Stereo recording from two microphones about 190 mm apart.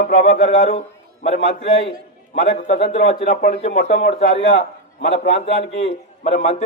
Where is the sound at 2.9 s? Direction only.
30° left (ahead or behind).